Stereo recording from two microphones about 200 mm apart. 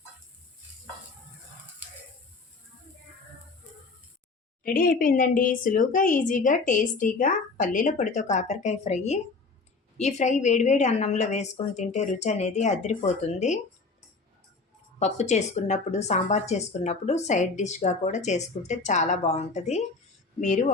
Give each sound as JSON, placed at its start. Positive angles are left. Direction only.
{"t": 4.6, "sound": "speech", "side_deg": 45}
{"t": 14.9, "sound": "speech", "side_deg": 35}